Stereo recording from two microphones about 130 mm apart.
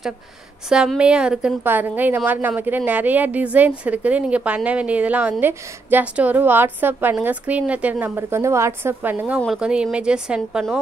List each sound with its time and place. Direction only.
0.7 s a woman's voice: 5° right (ahead or behind)
8.2 s a woman's voice: 20° right (ahead or behind)
9.5 s a woman's voice: 5° right (ahead or behind)